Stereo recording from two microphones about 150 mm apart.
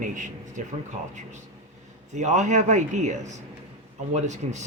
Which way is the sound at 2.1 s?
50° right (ahead or behind).